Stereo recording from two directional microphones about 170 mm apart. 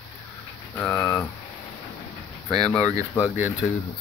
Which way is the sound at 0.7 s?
15° left (ahead or behind).